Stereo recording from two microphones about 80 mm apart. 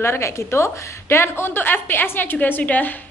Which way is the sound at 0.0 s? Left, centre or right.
Left.